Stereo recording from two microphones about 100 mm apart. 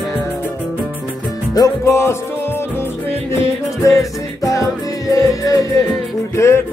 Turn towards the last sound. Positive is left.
turn(degrees=30)  # may be behind; listen again after turning